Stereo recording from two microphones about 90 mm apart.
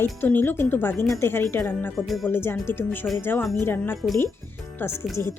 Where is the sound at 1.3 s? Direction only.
25° left (ahead or behind).